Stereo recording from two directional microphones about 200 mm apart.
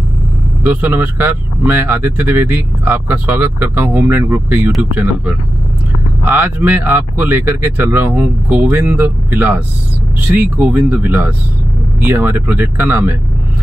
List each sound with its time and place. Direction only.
0.7 s speech: 10° right (ahead or behind)